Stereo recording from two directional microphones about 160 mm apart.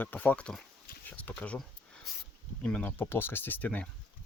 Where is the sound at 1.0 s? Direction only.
10° left (ahead or behind).